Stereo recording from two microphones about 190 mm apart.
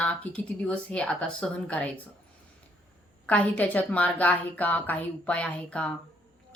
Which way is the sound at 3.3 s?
5° left (ahead or behind).